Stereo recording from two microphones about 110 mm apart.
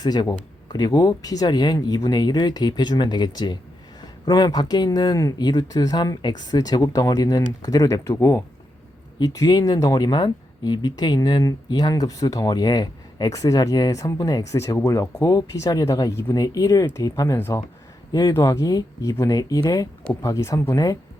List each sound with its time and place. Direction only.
0.0 s speech: 40° left (ahead or behind); by 17.6 s 25° left (ahead or behind)
18.1 s speech: 40° left (ahead or behind)